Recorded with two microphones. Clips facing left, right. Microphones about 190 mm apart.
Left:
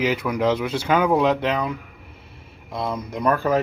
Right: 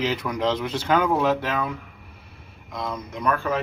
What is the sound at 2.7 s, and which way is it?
Speech, 30° left (ahead or behind).